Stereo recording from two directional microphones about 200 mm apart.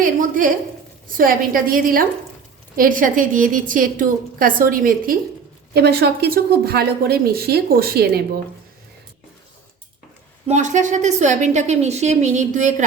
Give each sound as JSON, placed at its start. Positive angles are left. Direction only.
{"t": 0.0, "sound": "a sound", "side_deg": -40}
{"t": 1.1, "sound": "a woman's voice", "side_deg": -45}
{"t": 10.4, "sound": "a woman's voice", "side_deg": -35}